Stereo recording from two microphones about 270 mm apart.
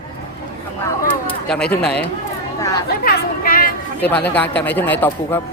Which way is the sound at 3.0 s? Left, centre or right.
Left.